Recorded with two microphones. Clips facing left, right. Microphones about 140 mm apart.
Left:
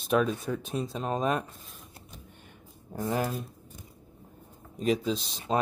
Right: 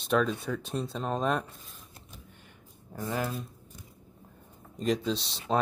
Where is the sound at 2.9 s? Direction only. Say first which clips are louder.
Left 4 dB; 20° left (ahead or behind).